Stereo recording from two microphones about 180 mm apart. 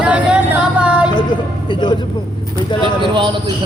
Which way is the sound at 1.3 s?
25° left (ahead or behind).